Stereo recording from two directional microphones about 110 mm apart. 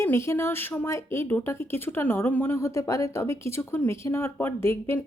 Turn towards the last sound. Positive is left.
turn(degrees=20)  # may be behind; listen again after turning